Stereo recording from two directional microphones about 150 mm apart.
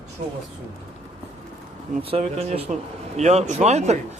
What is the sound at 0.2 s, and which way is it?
Speech, 45° right (ahead or behind).